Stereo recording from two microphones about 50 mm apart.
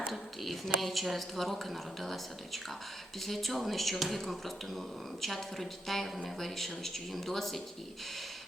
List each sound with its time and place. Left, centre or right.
0.0 s speech: centre